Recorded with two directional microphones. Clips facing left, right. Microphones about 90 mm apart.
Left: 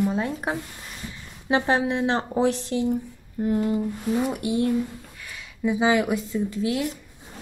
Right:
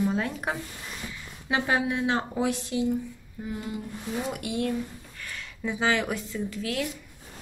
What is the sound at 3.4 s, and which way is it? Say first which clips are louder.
Speech: left 11 dB; 55° left (ahead or behind).